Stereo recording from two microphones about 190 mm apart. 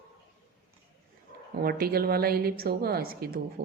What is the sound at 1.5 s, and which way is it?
A woman's voice, 55° right (ahead or behind).